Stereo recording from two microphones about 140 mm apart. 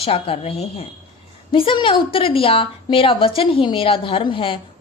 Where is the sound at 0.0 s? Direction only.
45° left (ahead or behind).